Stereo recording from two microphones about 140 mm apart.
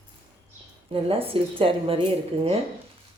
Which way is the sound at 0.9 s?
40° right (ahead or behind).